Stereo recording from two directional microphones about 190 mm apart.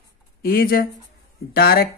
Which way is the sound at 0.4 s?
50° left (ahead or behind).